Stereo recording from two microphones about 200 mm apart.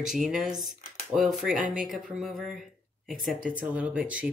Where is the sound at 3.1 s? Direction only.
40° right (ahead or behind).